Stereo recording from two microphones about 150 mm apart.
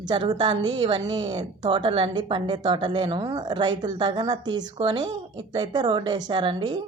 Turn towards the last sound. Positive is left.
turn(degrees=-30)  # may be behind; listen again after turning